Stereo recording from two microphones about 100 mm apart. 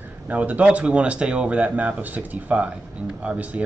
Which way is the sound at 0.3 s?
15° right (ahead or behind).